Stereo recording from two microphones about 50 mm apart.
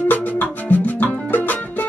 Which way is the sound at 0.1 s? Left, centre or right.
Left.